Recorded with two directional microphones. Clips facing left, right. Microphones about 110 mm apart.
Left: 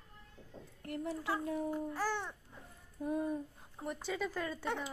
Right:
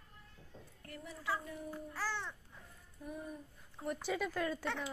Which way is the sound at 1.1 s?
75° left (ahead or behind).